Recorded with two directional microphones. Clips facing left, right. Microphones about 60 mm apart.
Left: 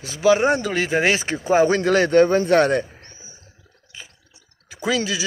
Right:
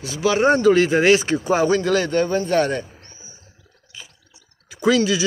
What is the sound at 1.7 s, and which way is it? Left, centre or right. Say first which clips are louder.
Speech: left 2 dB; left.